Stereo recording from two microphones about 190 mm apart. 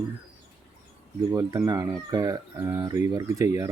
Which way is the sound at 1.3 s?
15° right (ahead or behind).